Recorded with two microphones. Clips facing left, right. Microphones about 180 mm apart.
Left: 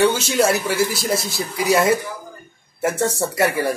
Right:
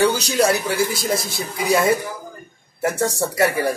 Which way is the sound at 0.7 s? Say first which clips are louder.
Left 1 dB; 30° left (ahead or behind).